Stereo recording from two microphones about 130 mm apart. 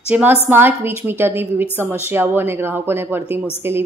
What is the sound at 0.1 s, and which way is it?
A woman's voice, 10° right (ahead or behind).